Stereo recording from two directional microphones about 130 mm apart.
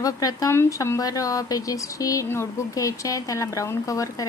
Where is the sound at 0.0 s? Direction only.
30° left (ahead or behind).